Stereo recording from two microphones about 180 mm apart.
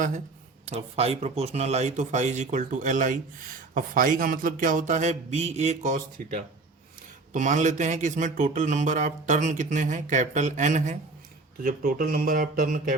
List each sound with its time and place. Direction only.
0.6 s a man's voice: 35° right (ahead or behind)